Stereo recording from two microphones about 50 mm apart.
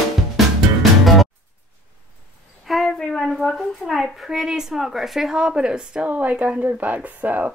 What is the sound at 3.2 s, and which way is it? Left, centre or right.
A woman's voice, centre.